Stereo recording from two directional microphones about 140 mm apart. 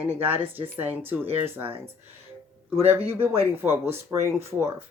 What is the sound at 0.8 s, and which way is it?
Speech, 15° right (ahead or behind).